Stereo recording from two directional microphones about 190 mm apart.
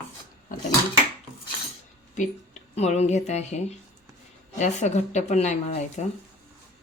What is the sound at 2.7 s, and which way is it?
Speech, 35° left (ahead or behind).